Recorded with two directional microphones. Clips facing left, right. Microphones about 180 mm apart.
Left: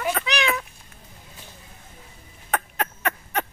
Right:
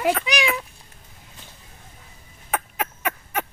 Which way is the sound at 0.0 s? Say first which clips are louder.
Right 3 dB; 10° right (ahead or behind).